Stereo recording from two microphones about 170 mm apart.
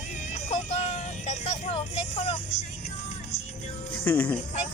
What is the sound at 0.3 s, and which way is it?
Music, 45° left (ahead or behind).